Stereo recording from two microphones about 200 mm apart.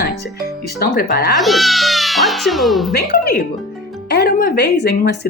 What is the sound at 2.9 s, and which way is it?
Speech, 50° left (ahead or behind).